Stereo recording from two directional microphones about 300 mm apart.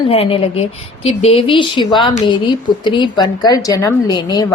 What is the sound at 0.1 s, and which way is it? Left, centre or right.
A woman's voice, centre.